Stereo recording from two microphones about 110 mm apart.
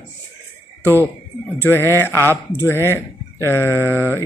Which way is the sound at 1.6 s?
20° left (ahead or behind).